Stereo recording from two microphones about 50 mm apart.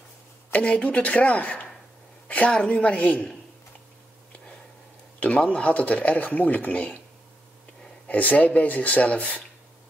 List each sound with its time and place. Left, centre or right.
0.5 s a woman's voice: left
5.2 s speech: left
8.1 s speech: left